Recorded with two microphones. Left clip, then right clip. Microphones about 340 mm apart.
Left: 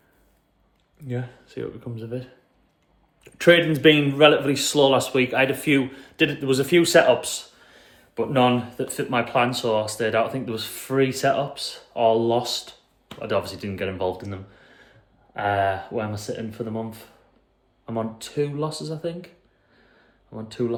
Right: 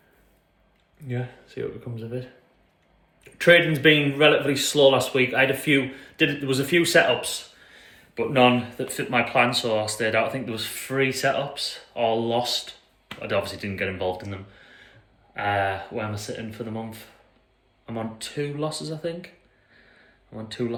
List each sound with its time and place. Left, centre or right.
1.0 s speech: centre
20.3 s speech: centre